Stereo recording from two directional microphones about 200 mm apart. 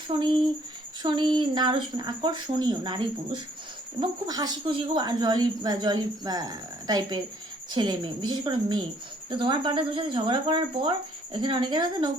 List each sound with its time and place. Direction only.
0.1 s speech: 25° right (ahead or behind)